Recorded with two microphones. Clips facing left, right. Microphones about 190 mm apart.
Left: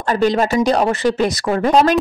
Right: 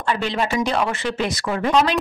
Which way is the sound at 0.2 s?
40° left (ahead or behind).